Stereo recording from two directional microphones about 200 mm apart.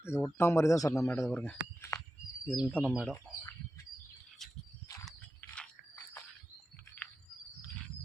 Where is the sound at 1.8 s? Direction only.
15° left (ahead or behind).